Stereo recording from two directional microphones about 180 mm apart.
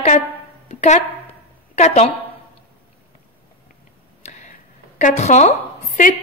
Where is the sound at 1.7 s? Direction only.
35° left (ahead or behind).